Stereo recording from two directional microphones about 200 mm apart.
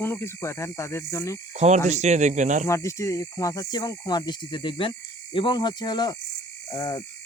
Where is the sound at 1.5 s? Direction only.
35° right (ahead or behind).